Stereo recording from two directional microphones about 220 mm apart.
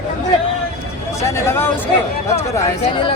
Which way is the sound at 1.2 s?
10° left (ahead or behind).